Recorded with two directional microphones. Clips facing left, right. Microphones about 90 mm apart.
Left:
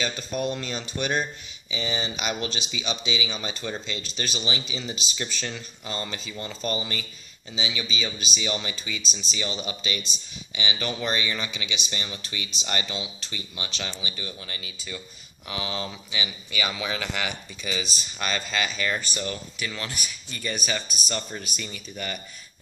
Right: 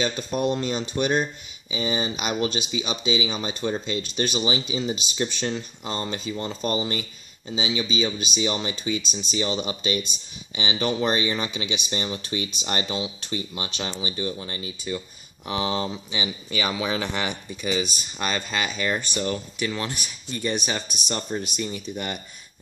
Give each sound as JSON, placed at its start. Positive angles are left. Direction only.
{"t": 0.0, "sound": "speech", "side_deg": -30}
{"t": 2.2, "sound": "speech", "side_deg": -30}
{"t": 7.8, "sound": "speech", "side_deg": -35}